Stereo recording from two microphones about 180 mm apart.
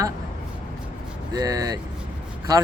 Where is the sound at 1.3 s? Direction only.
20° right (ahead or behind).